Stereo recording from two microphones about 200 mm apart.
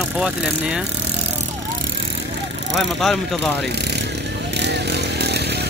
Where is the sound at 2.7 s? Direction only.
Centre (ahead or behind).